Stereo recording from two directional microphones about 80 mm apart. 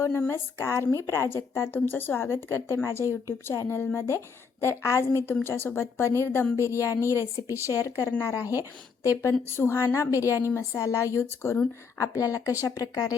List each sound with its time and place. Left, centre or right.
0.3 s a woman's voice: left
8.3 s speech: left
9.5 s a woman's voice: left